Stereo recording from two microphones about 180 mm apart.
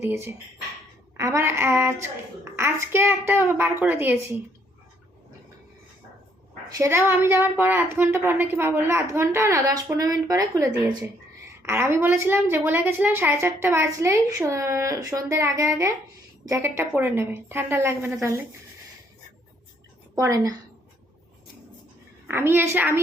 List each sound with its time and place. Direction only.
0.0 s a woman's voice: 15° right (ahead or behind)
6.7 s a woman's voice: 15° right (ahead or behind)
20.1 s a woman's voice: 20° right (ahead or behind)
22.3 s a woman's voice: 10° right (ahead or behind)